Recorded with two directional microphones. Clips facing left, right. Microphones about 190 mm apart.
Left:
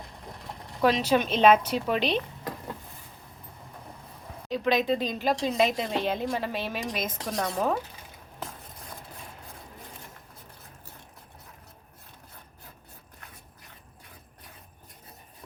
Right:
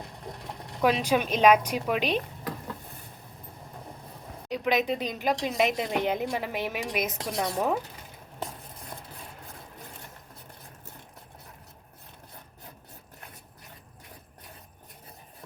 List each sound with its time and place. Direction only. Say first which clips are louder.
0.8 s a woman's voice: left 1 dB; 10° right (ahead or behind)
4.4 s a woman's voice: left 1 dB; 15° right (ahead or behind)